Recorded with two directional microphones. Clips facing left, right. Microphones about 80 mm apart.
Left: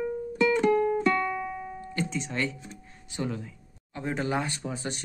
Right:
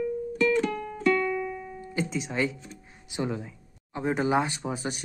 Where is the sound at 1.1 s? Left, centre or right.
Centre.